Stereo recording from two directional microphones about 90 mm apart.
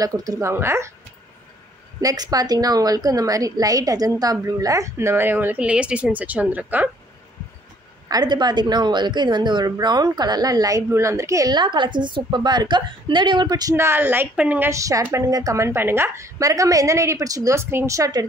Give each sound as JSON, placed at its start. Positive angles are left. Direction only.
{"t": 0.0, "sound": "a woman's voice", "side_deg": -40}
{"t": 0.5, "sound": "a woman's voice", "side_deg": -30}
{"t": 2.0, "sound": "a woman's voice", "side_deg": -45}
{"t": 8.1, "sound": "a woman's voice", "side_deg": -50}
{"t": 11.5, "sound": "a woman's voice", "side_deg": -60}
{"t": 13.7, "sound": "a woman's voice", "side_deg": -25}
{"t": 14.7, "sound": "a woman's voice", "side_deg": -35}